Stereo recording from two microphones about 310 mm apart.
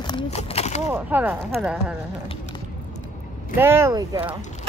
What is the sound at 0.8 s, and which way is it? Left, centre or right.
Speech, centre.